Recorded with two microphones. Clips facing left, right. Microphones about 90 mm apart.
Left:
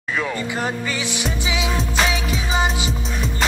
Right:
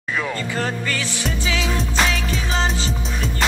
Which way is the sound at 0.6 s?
15° left (ahead or behind).